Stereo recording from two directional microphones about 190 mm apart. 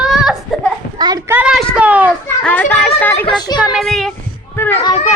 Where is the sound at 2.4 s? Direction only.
5° left (ahead or behind).